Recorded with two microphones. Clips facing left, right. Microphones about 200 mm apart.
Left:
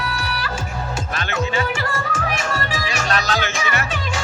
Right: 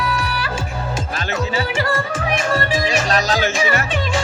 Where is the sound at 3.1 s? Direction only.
40° right (ahead or behind).